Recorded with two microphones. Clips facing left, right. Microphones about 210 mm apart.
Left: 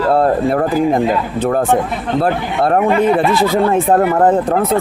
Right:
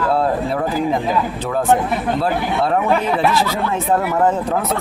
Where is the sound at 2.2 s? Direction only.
55° left (ahead or behind).